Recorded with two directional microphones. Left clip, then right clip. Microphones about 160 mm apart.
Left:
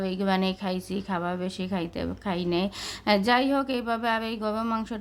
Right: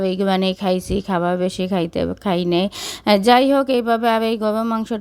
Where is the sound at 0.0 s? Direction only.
45° right (ahead or behind).